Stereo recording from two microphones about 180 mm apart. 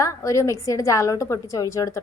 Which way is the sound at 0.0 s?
15° left (ahead or behind).